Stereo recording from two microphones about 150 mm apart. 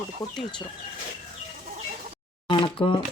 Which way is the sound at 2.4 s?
35° left (ahead or behind).